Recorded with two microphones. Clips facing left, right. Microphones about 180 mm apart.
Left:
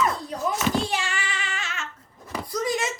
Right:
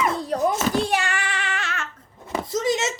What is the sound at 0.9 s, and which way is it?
Child singing, 55° right (ahead or behind).